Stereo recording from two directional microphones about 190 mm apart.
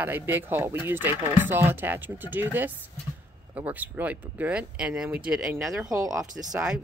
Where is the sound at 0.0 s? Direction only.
10° right (ahead or behind).